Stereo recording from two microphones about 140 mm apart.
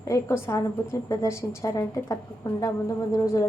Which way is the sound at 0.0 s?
20° left (ahead or behind).